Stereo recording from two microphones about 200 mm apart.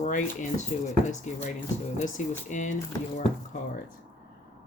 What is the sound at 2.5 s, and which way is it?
Speech, 40° left (ahead or behind).